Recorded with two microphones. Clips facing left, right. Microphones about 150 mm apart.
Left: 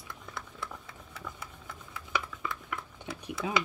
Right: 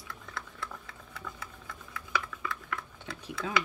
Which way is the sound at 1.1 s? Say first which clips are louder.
Even; 20° left (ahead or behind).